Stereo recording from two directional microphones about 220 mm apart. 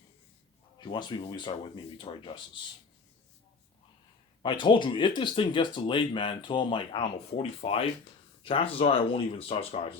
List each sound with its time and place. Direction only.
0.8 s speech: 20° left (ahead or behind)
4.4 s speech: 20° left (ahead or behind)